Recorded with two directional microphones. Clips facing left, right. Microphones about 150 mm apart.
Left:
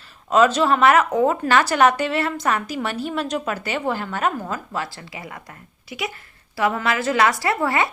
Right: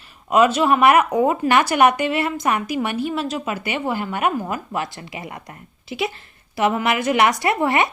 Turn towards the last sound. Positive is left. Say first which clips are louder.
# right 2 dB
turn(degrees=-20)  # may be behind; listen again after turning